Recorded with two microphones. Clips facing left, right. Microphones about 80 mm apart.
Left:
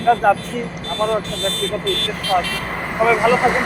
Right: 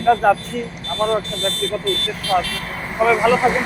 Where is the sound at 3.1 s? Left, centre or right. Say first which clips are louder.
Even; centre.